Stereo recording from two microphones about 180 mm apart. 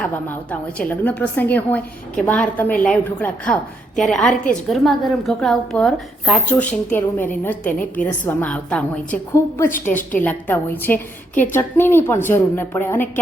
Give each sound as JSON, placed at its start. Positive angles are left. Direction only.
{"t": 0.8, "sound": "a woman's voice", "side_deg": 10}
{"t": 9.9, "sound": "a woman's voice", "side_deg": 45}
{"t": 10.2, "sound": "a woman's voice", "side_deg": 10}